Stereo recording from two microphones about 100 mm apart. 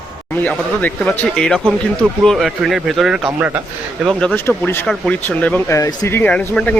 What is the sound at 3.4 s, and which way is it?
Speech, 20° right (ahead or behind).